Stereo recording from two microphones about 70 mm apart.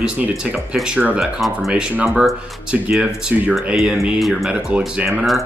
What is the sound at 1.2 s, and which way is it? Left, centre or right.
Speech, centre.